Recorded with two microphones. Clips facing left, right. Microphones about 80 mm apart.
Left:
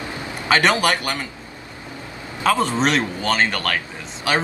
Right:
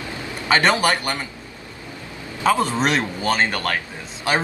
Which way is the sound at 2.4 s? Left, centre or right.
Centre.